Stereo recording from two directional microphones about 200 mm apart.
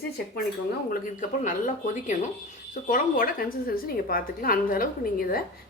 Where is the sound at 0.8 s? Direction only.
40° left (ahead or behind).